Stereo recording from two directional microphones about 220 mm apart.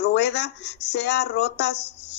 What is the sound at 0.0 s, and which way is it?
Speech, 50° left (ahead or behind).